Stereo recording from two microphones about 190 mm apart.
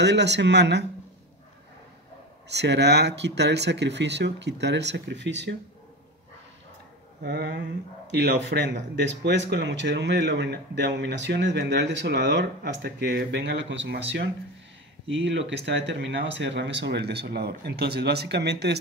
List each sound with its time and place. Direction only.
0.0 s speech: 65° right (ahead or behind)
2.5 s speech: 65° right (ahead or behind)
7.2 s speech: 55° right (ahead or behind)
8.2 s speech: 65° right (ahead or behind)
15.1 s speech: 75° right (ahead or behind)